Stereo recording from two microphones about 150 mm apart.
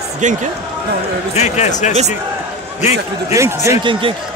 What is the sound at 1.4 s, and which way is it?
Speech, 50° left (ahead or behind).